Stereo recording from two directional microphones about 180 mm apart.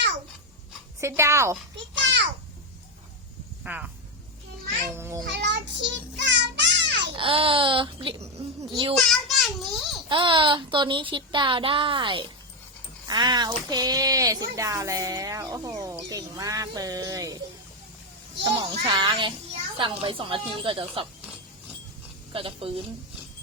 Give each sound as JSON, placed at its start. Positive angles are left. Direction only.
{"t": 1.0, "sound": "speech", "side_deg": -15}
{"t": 1.7, "sound": "a sound", "side_deg": -75}
{"t": 3.6, "sound": "speech", "side_deg": -5}
{"t": 4.9, "sound": "speech", "side_deg": -15}
{"t": 5.2, "sound": "child singing", "side_deg": -75}
{"t": 7.2, "sound": "speech", "side_deg": -30}
{"t": 9.0, "sound": "child singing", "side_deg": 0}
{"t": 10.1, "sound": "speech", "side_deg": -30}
{"t": 18.4, "sound": "speech", "side_deg": -20}
{"t": 22.3, "sound": "a woman's voice", "side_deg": -30}